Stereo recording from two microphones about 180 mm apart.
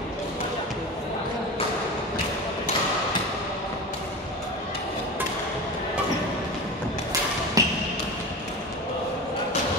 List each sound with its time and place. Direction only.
7.6 s basketball bounce: 20° right (ahead or behind)